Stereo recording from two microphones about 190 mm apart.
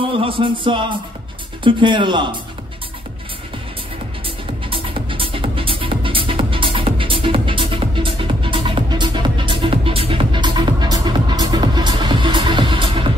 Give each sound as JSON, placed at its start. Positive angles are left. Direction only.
{"t": 0.1, "sound": "music", "side_deg": -30}
{"t": 1.6, "sound": "speech", "side_deg": -25}
{"t": 4.6, "sound": "music", "side_deg": -25}